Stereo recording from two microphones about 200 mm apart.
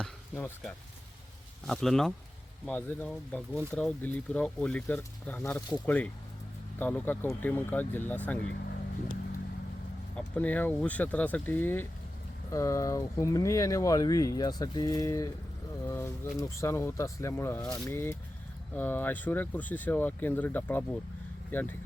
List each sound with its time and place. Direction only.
0.0 s speech: 5° left (ahead or behind)
10.2 s speech: 5° left (ahead or behind)